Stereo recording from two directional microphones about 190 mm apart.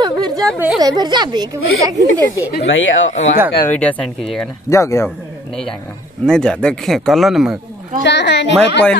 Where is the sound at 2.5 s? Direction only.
90° left.